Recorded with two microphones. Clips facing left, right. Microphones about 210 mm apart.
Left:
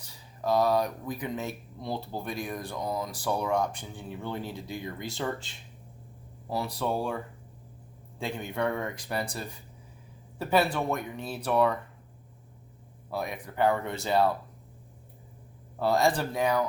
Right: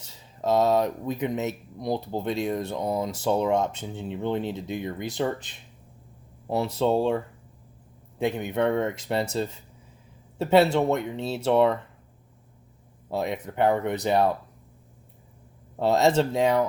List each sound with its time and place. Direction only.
0.0 s speech: 25° right (ahead or behind)
8.2 s speech: 20° right (ahead or behind)
13.1 s speech: 25° right (ahead or behind)
15.8 s speech: 25° right (ahead or behind)